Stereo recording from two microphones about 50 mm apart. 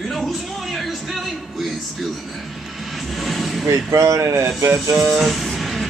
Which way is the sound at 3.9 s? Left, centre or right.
Right.